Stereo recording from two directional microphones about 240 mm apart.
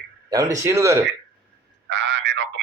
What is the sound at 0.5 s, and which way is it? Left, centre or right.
Speech, centre.